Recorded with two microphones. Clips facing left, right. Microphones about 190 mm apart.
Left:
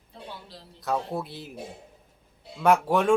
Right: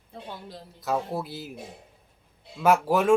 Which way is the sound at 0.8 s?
Centre (ahead or behind).